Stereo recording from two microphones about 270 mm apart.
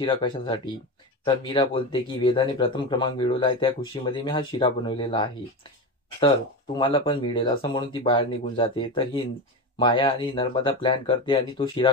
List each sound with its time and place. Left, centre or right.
0.0 s speech: centre
6.8 s speech: centre